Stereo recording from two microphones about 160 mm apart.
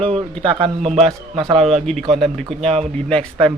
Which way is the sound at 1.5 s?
40° right (ahead or behind).